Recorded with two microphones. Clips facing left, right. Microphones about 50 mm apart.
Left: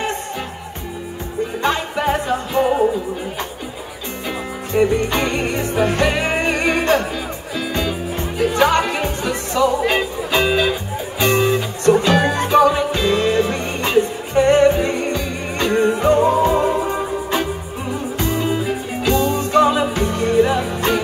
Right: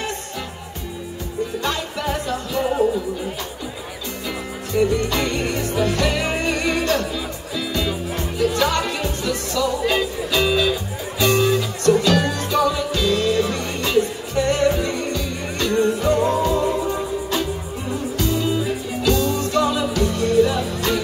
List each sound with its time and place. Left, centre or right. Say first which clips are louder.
1.6 s music: left 5 dB; left
4.7 s music: left 3 dB; left